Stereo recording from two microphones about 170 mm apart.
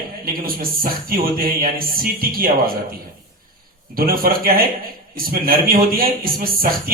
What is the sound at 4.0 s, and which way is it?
Speech, 60° right (ahead or behind).